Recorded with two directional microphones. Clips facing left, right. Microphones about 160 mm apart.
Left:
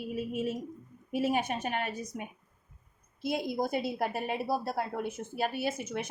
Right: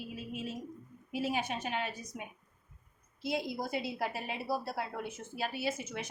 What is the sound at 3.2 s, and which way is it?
A woman's voice, 50° left (ahead or behind).